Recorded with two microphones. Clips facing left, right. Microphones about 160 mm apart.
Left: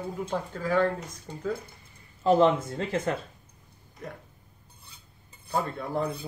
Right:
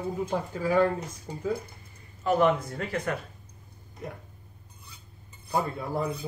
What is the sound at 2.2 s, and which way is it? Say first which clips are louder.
Speech: left 2 dB; 25° left (ahead or behind).